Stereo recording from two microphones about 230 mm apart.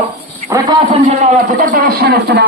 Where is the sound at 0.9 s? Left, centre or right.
Right.